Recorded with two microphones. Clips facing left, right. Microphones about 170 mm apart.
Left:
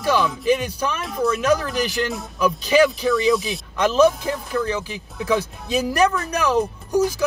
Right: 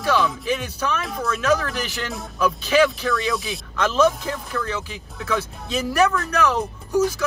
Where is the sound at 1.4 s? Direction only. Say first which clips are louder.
Left 2 dB; 10° left (ahead or behind).